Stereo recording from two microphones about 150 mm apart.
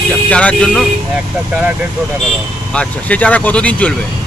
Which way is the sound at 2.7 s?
10° left (ahead or behind).